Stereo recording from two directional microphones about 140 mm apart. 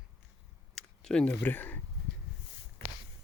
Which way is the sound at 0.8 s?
5° left (ahead or behind).